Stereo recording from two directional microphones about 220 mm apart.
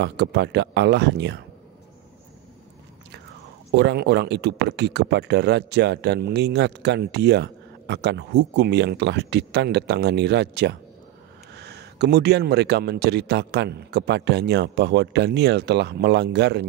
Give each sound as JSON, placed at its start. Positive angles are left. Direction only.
{"t": 0.0, "sound": "speech", "side_deg": -50}
{"t": 3.7, "sound": "speech", "side_deg": -50}